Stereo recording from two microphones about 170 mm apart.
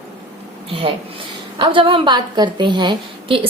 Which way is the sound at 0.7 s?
30° right (ahead or behind).